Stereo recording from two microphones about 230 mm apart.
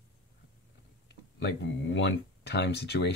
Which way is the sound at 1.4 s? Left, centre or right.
Left.